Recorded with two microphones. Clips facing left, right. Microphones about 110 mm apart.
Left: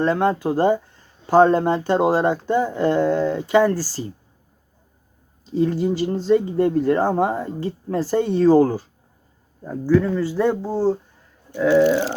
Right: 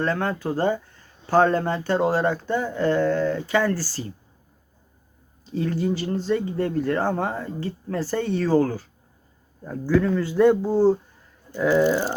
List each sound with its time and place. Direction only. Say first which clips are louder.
0.0 s speech: left 6 dB; 20° left (ahead or behind)
5.5 s speech: left 5 dB; 15° left (ahead or behind)
9.6 s speech: left 3 dB; 10° left (ahead or behind)